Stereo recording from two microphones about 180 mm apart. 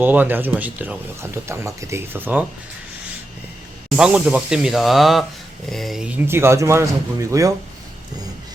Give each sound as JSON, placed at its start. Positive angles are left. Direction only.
{"t": 0.0, "sound": "speech", "side_deg": -10}
{"t": 3.8, "sound": "speech", "side_deg": -5}